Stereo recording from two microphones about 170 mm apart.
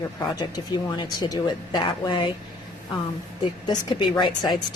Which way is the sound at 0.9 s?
25° left (ahead or behind).